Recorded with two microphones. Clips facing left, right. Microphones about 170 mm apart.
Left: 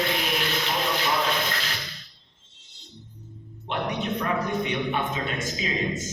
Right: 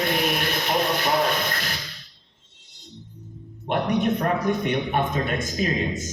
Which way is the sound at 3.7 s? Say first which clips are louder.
Right 6 dB; 50° right (ahead or behind).